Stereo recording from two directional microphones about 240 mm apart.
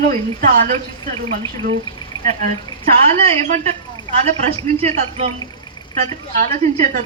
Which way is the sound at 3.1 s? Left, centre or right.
Right.